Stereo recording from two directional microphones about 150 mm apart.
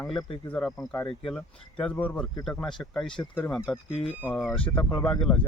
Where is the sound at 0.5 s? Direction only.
10° left (ahead or behind).